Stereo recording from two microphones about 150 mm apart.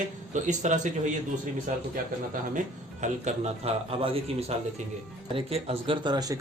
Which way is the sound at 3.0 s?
50° right (ahead or behind).